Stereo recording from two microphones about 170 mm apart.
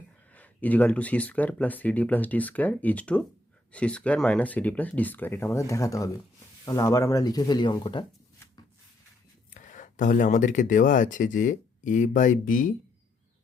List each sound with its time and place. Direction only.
0.3 s speech: 10° left (ahead or behind); by 8.0 s 25° left (ahead or behind)
9.6 s speech: 45° left (ahead or behind)